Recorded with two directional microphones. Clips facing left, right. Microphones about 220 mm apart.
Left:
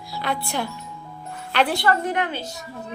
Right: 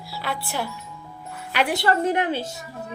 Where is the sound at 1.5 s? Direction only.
10° right (ahead or behind).